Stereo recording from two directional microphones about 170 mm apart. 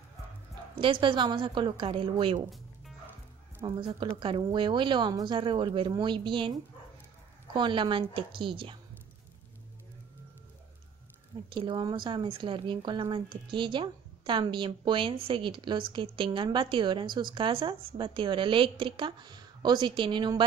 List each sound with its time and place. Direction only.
0.7 s speech: 30° right (ahead or behind)
3.6 s speech: 30° right (ahead or behind)
7.5 s a woman's voice: 25° right (ahead or behind)
11.5 s speech: 30° right (ahead or behind)